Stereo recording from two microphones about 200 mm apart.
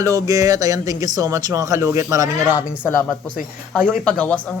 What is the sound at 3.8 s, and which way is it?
Speech, 5° right (ahead or behind).